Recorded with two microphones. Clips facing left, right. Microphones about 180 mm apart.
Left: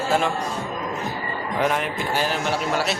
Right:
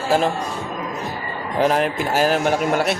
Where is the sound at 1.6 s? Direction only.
35° right (ahead or behind); by 3.0 s 55° right (ahead or behind).